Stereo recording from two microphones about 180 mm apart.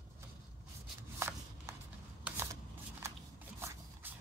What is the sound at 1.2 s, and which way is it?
Shuffling cards, 15° right (ahead or behind).